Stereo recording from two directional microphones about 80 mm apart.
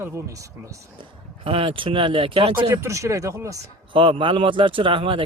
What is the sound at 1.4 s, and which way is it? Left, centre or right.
Speech, right.